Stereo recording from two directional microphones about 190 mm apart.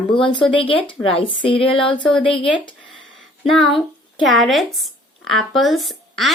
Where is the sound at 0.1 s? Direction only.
25° left (ahead or behind).